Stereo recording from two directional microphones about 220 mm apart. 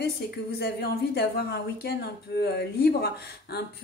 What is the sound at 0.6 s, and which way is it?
A woman's voice, 45° left (ahead or behind).